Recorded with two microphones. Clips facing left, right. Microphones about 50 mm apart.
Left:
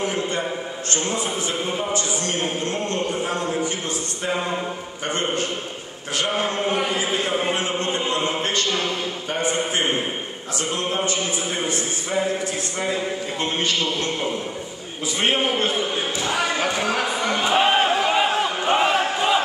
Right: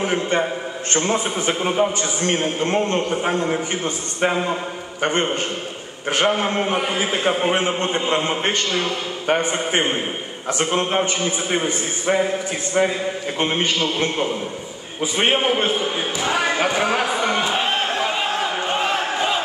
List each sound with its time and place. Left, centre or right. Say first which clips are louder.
0.0 s a man's voice: right 4 dB; right
5.0 s a man's voice: right 4 dB; right
13.4 s a man's voice: right 4 dB; right
15.1 s a man's voice: right 3 dB; right
17.5 s crowd: left 3 dB; centre